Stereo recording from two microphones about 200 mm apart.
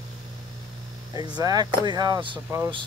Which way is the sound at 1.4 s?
20° right (ahead or behind).